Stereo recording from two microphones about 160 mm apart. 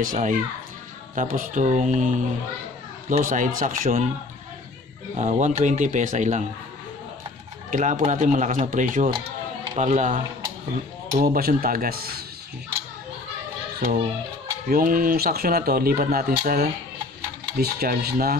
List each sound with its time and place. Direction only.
0.0 s speech: 55° right (ahead or behind)
5.1 s speech: 45° right (ahead or behind)
7.7 s speech: 50° right (ahead or behind)
9.8 s speech: 50° right (ahead or behind)
11.2 s speech: 70° right (ahead or behind)
14.7 s speech: 60° right (ahead or behind)